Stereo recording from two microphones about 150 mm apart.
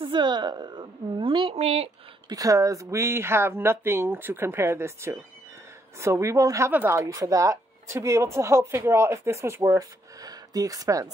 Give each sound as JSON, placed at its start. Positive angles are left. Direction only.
{"t": 0.0, "sound": "a woman's voice", "side_deg": -30}
{"t": 2.2, "sound": "a woman's voice", "side_deg": -25}